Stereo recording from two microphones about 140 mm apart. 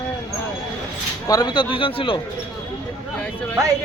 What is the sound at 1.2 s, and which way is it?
Speech, 25° left (ahead or behind).